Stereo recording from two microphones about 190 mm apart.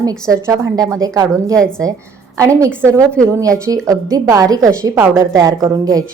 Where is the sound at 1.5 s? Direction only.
5° left (ahead or behind).